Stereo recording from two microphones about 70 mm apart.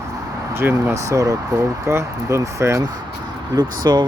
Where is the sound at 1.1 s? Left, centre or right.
Right.